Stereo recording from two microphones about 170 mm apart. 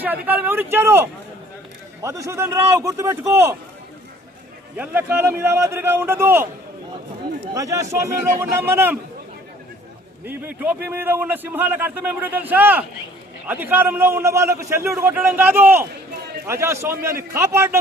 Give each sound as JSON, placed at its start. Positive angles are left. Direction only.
{"t": 0.0, "sound": "a man's voice", "side_deg": -10}
{"t": 4.8, "sound": "a man's voice", "side_deg": -10}
{"t": 7.5, "sound": "a man's voice", "side_deg": -20}
{"t": 10.2, "sound": "a man's voice", "side_deg": -10}